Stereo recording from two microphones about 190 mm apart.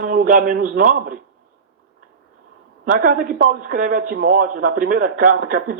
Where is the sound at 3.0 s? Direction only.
50° right (ahead or behind).